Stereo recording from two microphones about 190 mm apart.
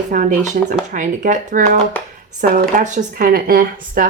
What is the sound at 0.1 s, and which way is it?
Speech, 45° right (ahead or behind).